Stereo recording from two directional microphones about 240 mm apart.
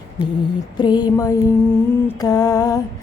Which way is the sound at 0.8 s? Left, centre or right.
Centre.